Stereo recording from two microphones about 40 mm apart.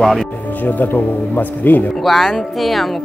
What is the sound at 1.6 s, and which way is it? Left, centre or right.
Speech, left.